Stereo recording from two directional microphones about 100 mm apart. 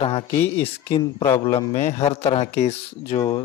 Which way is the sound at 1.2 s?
30° left (ahead or behind).